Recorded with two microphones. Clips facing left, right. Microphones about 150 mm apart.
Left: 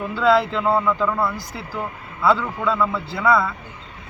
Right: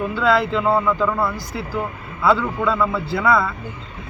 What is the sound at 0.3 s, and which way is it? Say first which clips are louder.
A man's voice: left 1 dB; centre (ahead or behind).